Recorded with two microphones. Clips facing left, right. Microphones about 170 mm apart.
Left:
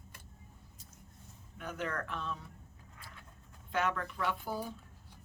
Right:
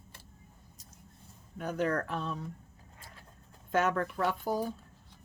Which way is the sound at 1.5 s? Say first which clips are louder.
Right 8 dB; 40° right (ahead or behind).